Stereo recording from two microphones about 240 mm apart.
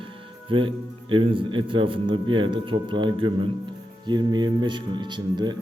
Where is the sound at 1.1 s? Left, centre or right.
Right.